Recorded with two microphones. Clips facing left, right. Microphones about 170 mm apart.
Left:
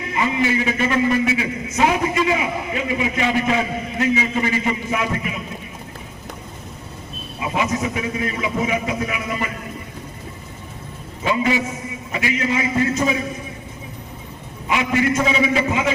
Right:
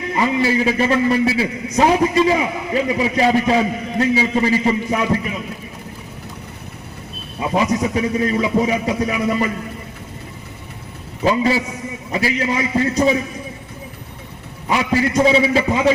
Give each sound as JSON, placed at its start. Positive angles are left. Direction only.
{"t": 0.2, "sound": "a man's voice", "side_deg": -35}
{"t": 7.5, "sound": "a man's voice", "side_deg": -35}
{"t": 11.2, "sound": "a man's voice", "side_deg": -35}
{"t": 14.7, "sound": "a man's voice", "side_deg": -35}